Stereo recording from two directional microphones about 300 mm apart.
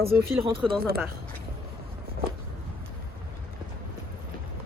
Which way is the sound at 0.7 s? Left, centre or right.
Right.